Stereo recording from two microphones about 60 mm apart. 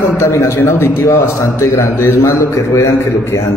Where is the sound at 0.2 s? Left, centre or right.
Left.